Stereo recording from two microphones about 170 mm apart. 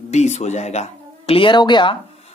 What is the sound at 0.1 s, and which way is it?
Speech, 40° left (ahead or behind).